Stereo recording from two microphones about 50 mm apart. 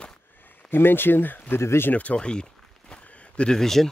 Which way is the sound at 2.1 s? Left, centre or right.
Centre.